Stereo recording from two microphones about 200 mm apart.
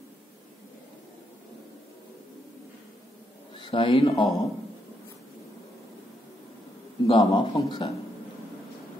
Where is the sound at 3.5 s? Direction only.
25° left (ahead or behind).